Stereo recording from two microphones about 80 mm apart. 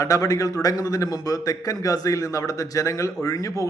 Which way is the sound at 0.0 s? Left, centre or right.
Left.